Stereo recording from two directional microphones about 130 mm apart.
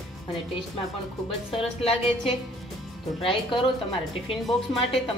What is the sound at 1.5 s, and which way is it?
A woman's voice, 50° left (ahead or behind).